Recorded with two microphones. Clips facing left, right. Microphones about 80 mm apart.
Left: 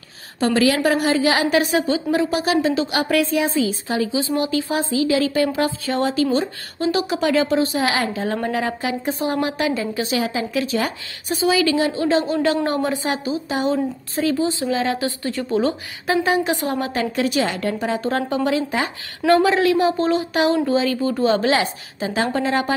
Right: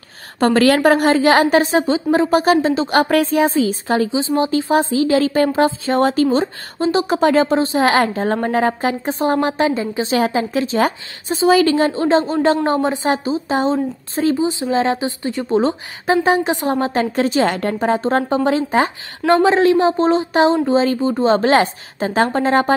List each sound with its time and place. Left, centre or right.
0.4 s a woman's voice: right
1.6 s a woman's voice: right
4.1 s a woman's voice: right
7.8 s a woman's voice: right
10.1 s a woman's voice: right
11.5 s a woman's voice: right